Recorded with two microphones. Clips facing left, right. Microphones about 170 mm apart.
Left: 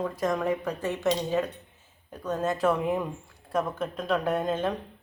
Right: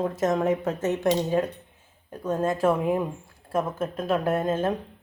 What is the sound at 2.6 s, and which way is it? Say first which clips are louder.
Speech: right 2 dB; 5° right (ahead or behind).